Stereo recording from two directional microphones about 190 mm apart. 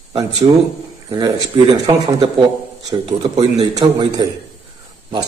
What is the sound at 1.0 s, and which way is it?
Speech, 25° right (ahead or behind).